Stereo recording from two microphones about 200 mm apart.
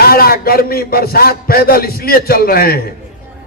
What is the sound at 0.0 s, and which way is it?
A man's voice, 50° left (ahead or behind).